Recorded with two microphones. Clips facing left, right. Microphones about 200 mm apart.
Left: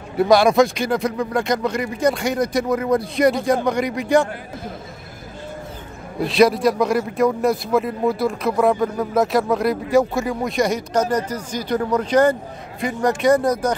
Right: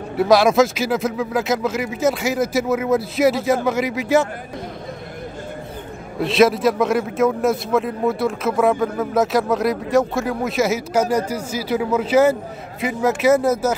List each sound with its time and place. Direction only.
0.2 s a man's voice: centre (ahead or behind)
6.1 s a man's voice: centre (ahead or behind)